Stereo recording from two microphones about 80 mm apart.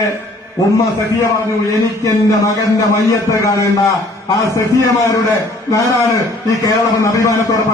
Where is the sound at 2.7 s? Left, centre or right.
Left.